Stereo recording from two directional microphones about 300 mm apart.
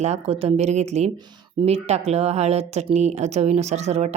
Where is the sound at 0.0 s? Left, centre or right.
Right.